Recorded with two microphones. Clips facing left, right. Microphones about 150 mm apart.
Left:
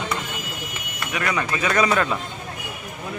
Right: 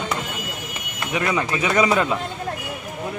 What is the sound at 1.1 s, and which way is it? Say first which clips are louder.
Speech: right 3 dB; 25° right (ahead or behind).